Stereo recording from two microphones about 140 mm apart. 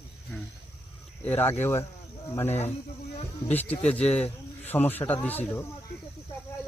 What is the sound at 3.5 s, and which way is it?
Speech, 10° left (ahead or behind).